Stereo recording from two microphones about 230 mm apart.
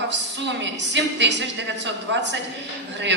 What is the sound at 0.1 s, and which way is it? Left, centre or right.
A woman's voice, right.